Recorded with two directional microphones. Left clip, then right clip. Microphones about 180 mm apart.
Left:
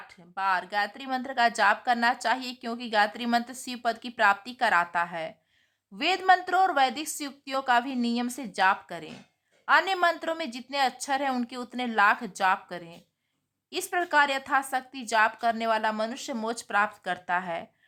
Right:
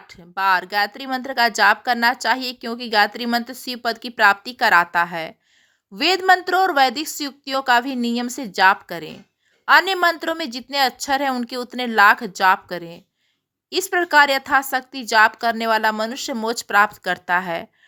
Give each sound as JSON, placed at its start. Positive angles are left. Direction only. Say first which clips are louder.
{"t": 0.1, "sound": "speech", "louder": "right 9 dB", "side_deg": -30}